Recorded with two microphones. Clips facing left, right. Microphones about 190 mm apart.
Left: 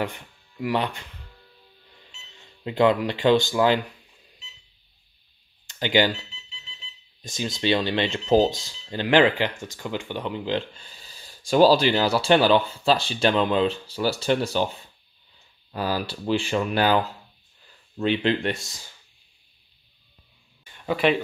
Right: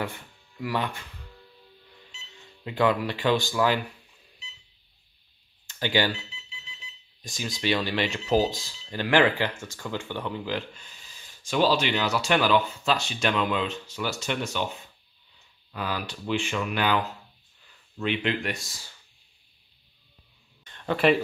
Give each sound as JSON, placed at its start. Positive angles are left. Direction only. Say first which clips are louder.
{"t": 0.0, "sound": "speech", "louder": "left 4 dB", "side_deg": 20}
{"t": 2.6, "sound": "speech", "louder": "left 4 dB", "side_deg": 25}
{"t": 5.7, "sound": "speech", "louder": "left 4 dB", "side_deg": 20}
{"t": 7.2, "sound": "speech", "louder": "left 5 dB", "side_deg": 25}
{"t": 20.6, "sound": "a sound", "louder": "even", "side_deg": 10}